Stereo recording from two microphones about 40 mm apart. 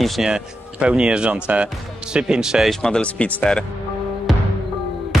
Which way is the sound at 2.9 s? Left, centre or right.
Left.